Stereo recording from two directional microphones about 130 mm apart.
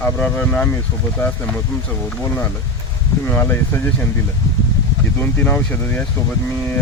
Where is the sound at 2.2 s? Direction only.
20° left (ahead or behind).